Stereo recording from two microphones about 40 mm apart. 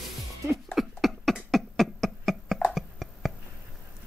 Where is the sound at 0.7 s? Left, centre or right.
Centre.